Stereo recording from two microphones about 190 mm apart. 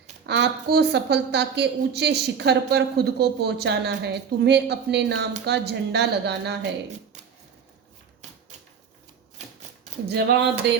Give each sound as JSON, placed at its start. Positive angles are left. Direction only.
{"t": 0.3, "sound": "a woman's voice", "side_deg": -65}
{"t": 10.1, "sound": "a woman's voice", "side_deg": -60}